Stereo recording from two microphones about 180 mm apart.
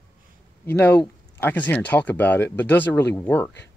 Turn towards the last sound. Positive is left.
turn(degrees=10)  # may be behind; listen again after turning